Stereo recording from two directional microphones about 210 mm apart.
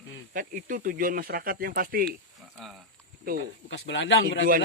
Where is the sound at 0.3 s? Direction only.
40° right (ahead or behind).